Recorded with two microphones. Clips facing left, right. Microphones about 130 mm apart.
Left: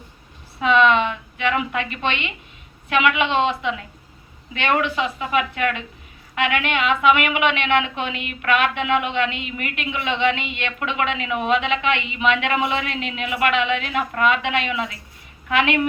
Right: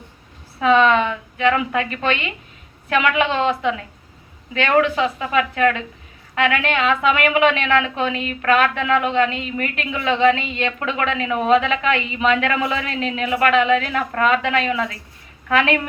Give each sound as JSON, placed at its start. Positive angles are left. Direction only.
{"t": 0.6, "sound": "a woman's voice", "side_deg": -40}